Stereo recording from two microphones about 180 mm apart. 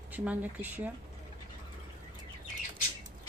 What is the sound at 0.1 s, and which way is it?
Speech, 10° right (ahead or behind).